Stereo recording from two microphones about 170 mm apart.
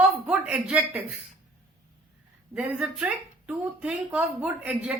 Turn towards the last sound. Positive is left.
turn(degrees=-5)  # may be behind; listen again after turning